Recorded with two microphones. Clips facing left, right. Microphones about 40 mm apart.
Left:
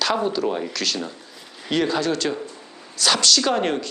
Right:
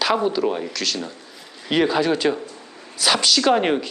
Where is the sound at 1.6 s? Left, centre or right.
Centre.